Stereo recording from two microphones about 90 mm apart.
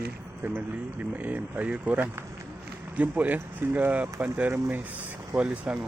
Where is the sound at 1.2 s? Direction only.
15° right (ahead or behind).